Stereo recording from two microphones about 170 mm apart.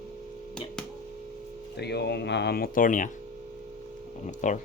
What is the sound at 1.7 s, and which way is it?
Speech, 75° left (ahead or behind).